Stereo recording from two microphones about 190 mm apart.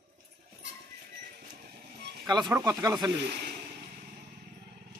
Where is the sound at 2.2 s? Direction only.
25° right (ahead or behind).